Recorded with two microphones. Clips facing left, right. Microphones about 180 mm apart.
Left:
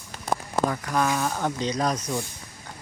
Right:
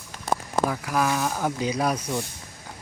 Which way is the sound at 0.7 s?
5° right (ahead or behind).